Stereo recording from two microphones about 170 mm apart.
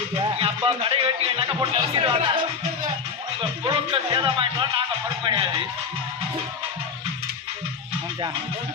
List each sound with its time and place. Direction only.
0.2 s speech: 30° right (ahead or behind)
3.6 s speech: 25° right (ahead or behind)